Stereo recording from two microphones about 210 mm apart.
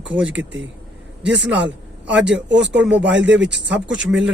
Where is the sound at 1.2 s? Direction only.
60° right (ahead or behind).